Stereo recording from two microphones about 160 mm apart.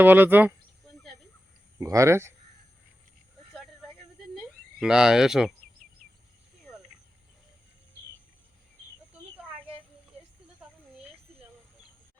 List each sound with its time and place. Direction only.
0.0 s speech: 10° right (ahead or behind)
1.8 s speech: 20° right (ahead or behind)
4.8 s speech: 5° right (ahead or behind)